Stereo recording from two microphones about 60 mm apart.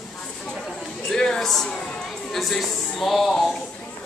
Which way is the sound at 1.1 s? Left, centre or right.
Centre.